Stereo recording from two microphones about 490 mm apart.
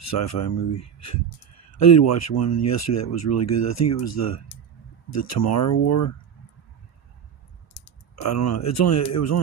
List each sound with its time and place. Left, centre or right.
0.0 s speech: left
8.1 s speech: left